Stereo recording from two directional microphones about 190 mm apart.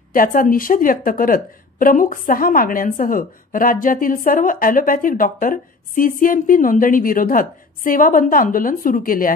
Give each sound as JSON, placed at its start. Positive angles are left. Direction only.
{"t": 0.1, "sound": "a woman's voice", "side_deg": 45}